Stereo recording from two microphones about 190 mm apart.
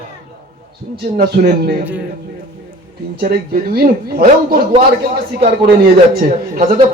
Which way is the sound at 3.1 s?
50° right (ahead or behind).